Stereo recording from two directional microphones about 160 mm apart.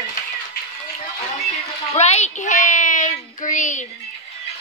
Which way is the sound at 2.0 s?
45° left (ahead or behind).